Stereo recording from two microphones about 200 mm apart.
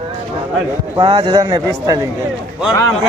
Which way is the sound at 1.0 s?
25° right (ahead or behind).